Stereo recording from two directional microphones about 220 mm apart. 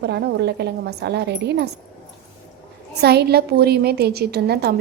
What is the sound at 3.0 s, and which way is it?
A woman's voice, 45° right (ahead or behind).